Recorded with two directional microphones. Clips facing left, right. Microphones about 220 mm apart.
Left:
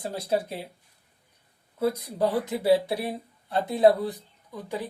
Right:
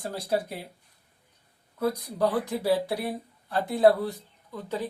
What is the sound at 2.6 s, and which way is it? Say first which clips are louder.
Speech: left 6 dB; 25° left (ahead or behind).